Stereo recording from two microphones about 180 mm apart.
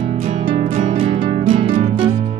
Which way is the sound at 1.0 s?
30° right (ahead or behind).